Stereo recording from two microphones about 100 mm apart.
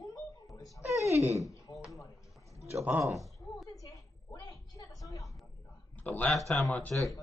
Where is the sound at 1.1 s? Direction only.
30° right (ahead or behind).